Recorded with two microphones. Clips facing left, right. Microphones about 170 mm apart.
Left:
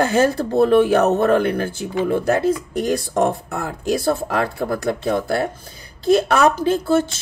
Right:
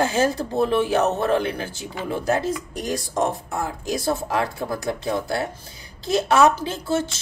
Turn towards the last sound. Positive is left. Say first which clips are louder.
# left 7 dB
turn(degrees=55)  # may be behind; listen again after turning